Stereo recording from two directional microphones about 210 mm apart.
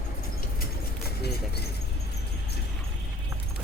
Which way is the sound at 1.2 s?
50° left (ahead or behind).